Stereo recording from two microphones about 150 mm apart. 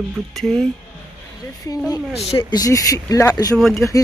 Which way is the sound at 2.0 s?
5° right (ahead or behind).